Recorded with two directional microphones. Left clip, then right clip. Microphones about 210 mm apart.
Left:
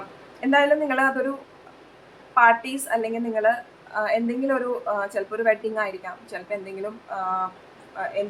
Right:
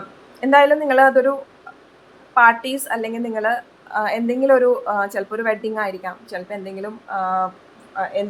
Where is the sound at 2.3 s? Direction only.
30° right (ahead or behind).